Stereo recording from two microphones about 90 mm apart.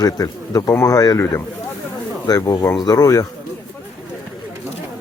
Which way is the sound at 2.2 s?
40° left (ahead or behind).